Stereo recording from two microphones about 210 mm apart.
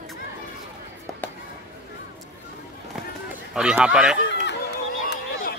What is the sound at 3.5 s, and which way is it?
Speech, 5° right (ahead or behind).